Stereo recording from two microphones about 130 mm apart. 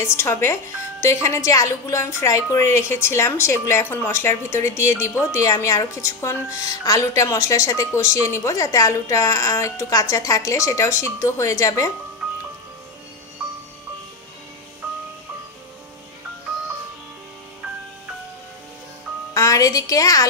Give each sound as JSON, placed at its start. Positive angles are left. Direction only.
{"t": 0.0, "sound": "a woman's voice", "side_deg": 20}
{"t": 19.3, "sound": "a woman's voice", "side_deg": 25}